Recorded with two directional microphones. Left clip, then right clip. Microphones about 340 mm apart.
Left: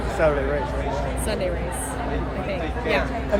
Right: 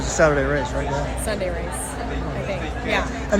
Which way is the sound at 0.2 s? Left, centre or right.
Right.